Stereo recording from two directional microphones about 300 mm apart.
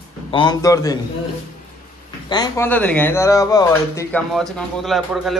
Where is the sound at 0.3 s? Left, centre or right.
Centre.